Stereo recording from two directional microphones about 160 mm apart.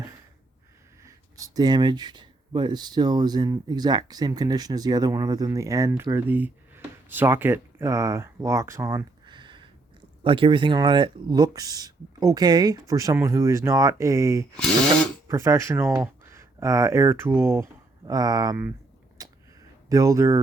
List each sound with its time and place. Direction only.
1.0 s speech: 20° right (ahead or behind)
9.2 s a sound: 30° right (ahead or behind)
10.2 s speech: 30° right (ahead or behind)
14.5 s speech: 5° left (ahead or behind)
15.3 s speech: 20° right (ahead or behind)
19.2 s a sound: 20° right (ahead or behind)
19.9 s speech: 20° right (ahead or behind)